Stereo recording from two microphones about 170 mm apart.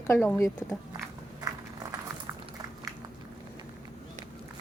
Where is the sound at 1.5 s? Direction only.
20° right (ahead or behind).